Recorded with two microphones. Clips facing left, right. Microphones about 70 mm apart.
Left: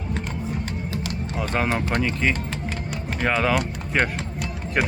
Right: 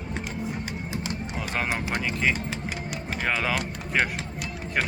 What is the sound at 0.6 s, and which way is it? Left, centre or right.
Music, centre.